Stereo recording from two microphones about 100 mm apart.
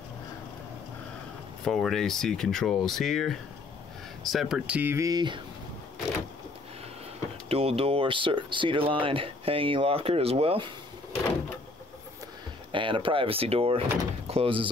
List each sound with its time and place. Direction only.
1.6 s speech: 5° left (ahead or behind); by 4.9 s 15° right (ahead or behind)
4.9 s speech: 35° right (ahead or behind)
7.4 s speech: 80° right
12.7 s speech: 55° right (ahead or behind)